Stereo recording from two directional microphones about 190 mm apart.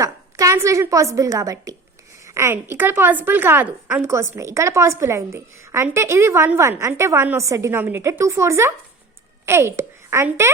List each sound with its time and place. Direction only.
0.0 s a woman's voice: 15° right (ahead or behind)